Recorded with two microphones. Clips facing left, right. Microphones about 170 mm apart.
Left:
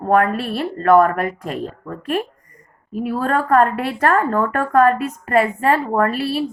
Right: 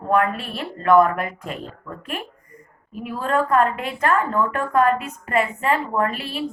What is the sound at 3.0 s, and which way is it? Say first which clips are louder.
A woman's voice: left 2 dB; 40° left (ahead or behind).